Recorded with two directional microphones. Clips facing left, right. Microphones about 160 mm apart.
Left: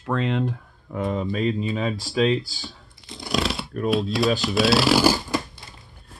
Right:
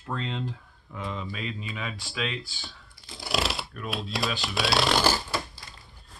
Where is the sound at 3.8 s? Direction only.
Centre (ahead or behind).